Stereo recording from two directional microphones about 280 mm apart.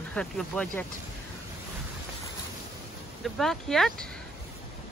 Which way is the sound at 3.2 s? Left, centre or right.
Centre.